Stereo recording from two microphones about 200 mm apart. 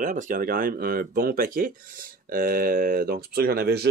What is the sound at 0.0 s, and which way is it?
Speech, 40° right (ahead or behind).